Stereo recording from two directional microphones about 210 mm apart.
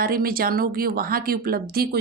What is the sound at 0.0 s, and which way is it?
A woman's voice, 45° right (ahead or behind).